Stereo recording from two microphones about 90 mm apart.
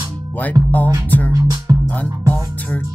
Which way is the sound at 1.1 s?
20° left (ahead or behind).